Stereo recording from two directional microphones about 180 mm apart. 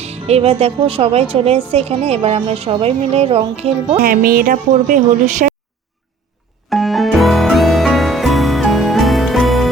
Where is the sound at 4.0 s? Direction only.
55° right (ahead or behind).